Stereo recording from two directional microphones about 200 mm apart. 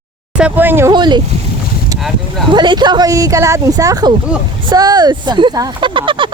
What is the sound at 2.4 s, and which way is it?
Speech, 25° right (ahead or behind).